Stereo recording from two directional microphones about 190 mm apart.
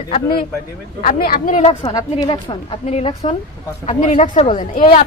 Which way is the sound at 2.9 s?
35° left (ahead or behind).